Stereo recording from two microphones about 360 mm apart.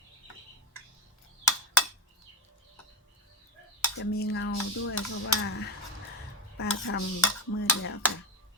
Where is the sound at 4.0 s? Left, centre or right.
Left.